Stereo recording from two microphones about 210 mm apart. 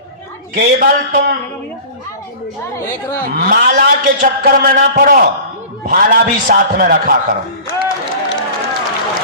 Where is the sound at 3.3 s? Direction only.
45° right (ahead or behind).